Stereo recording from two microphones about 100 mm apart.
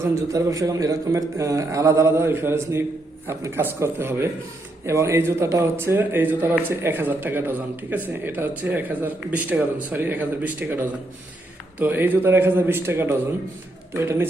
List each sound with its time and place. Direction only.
0.0 s a man's voice: 30° right (ahead or behind)